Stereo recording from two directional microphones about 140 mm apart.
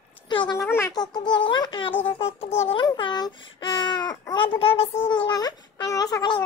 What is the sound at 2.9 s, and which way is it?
Baby cry, 30° left (ahead or behind).